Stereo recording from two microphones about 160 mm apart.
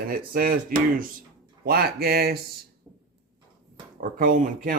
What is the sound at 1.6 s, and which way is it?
Speech, 75° right (ahead or behind).